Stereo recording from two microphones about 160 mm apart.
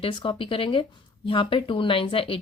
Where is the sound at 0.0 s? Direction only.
30° left (ahead or behind).